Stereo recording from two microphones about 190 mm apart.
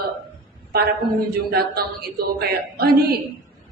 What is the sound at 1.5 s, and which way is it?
A woman's voice, 55° right (ahead or behind).